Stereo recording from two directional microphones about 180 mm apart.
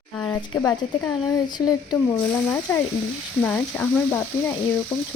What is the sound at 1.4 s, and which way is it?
Speech, 20° left (ahead or behind).